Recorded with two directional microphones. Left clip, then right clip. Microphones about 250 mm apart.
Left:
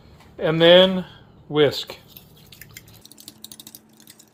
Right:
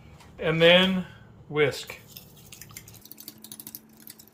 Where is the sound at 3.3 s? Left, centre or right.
Centre.